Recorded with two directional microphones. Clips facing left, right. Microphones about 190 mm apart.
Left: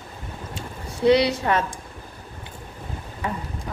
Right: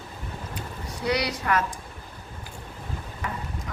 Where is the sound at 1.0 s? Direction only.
25° left (ahead or behind).